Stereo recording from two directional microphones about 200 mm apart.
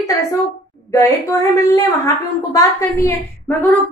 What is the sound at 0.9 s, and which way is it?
A woman's voice, 15° left (ahead or behind).